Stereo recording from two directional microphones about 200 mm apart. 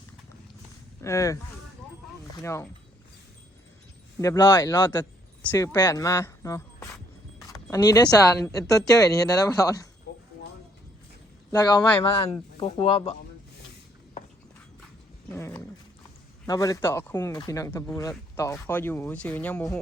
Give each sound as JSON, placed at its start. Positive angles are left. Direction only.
{"t": 1.0, "sound": "speech", "side_deg": 15}
{"t": 2.4, "sound": "speech", "side_deg": 15}
{"t": 4.2, "sound": "a woman's voice", "side_deg": 15}
{"t": 10.1, "sound": "a sound", "side_deg": 55}
{"t": 11.5, "sound": "speech", "side_deg": 20}
{"t": 15.3, "sound": "speech", "side_deg": 10}